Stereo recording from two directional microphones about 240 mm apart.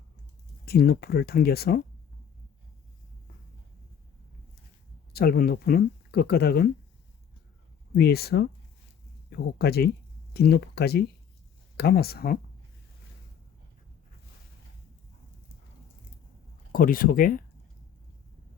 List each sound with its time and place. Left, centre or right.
0.6 s speech: left
5.1 s speech: left
7.9 s speech: left
16.7 s speech: left